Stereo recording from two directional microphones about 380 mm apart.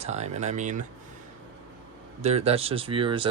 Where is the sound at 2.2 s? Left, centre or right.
Centre.